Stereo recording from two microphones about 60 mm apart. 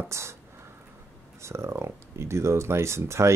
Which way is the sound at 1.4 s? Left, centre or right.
Right.